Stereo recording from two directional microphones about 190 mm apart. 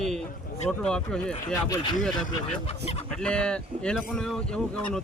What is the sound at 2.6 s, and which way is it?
Speech, 35° left (ahead or behind).